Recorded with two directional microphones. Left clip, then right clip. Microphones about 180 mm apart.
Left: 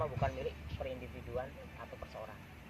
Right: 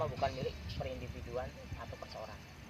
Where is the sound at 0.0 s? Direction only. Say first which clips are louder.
Right 1 dB; 15° right (ahead or behind).